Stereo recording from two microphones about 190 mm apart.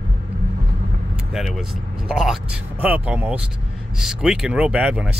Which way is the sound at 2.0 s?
Centre (ahead or behind).